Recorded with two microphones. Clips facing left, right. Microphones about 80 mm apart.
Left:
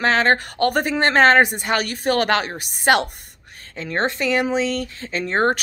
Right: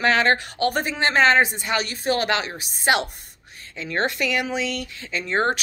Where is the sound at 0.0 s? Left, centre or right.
Left.